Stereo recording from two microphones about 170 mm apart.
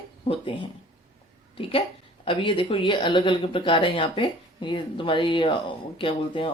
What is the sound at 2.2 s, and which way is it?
Speech, 30° left (ahead or behind).